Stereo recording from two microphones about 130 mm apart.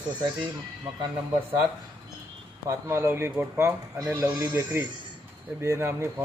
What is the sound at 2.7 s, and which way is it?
Speech, 20° right (ahead or behind).